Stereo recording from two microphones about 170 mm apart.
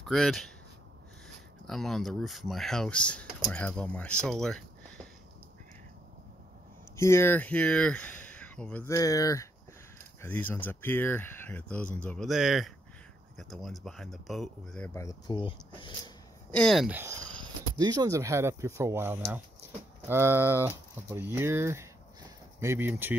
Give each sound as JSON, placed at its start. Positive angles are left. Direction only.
{"t": 0.0, "sound": "speech", "side_deg": 0}
{"t": 1.7, "sound": "speech", "side_deg": 0}
{"t": 7.0, "sound": "speech", "side_deg": 15}
{"t": 12.3, "sound": "speech", "side_deg": 0}
{"t": 15.0, "sound": "speech", "side_deg": 20}
{"t": 16.4, "sound": "speech", "side_deg": 5}
{"t": 16.9, "sound": "speech", "side_deg": -15}